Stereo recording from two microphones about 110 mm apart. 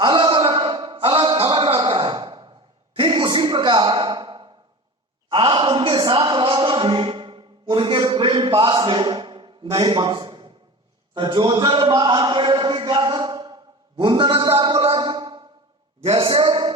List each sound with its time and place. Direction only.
0.0 s a sound: 45° right (ahead or behind)
9.7 s a man's voice: 50° right (ahead or behind)
14.9 s music: 45° right (ahead or behind)
16.0 s a man's voice: 55° right (ahead or behind)